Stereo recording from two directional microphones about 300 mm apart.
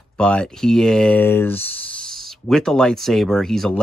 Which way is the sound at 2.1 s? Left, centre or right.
Centre.